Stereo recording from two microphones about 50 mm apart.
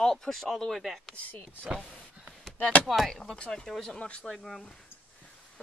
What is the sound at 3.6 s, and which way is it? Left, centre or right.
Speech, centre.